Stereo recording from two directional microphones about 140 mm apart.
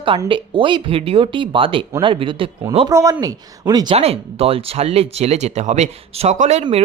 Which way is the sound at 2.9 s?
25° right (ahead or behind).